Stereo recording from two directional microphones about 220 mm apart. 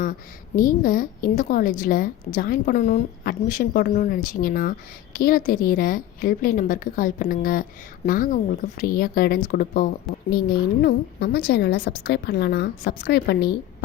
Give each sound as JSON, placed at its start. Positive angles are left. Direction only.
{"t": 0.0, "sound": "a woman's voice", "side_deg": 40}